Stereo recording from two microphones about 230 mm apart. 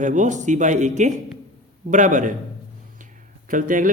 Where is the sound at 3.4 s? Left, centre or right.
Right.